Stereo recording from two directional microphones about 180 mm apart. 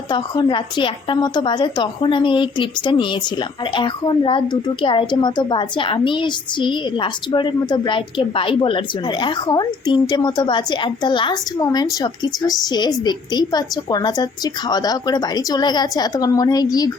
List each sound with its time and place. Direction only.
0.1 s a woman's voice: 25° left (ahead or behind)